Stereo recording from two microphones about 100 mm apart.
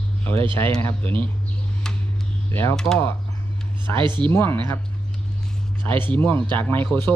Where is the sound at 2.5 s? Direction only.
25° left (ahead or behind).